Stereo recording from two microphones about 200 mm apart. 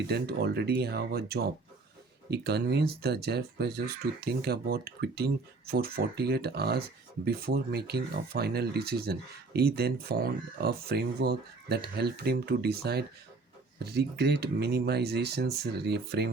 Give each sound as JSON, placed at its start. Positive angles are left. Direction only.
{"t": 0.1, "sound": "speech", "side_deg": -55}